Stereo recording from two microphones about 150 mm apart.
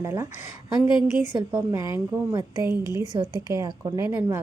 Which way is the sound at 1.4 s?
20° right (ahead or behind).